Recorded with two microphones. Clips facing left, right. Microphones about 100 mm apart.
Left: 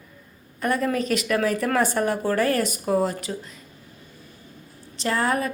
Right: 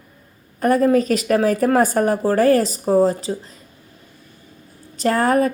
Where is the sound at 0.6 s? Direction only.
40° right (ahead or behind).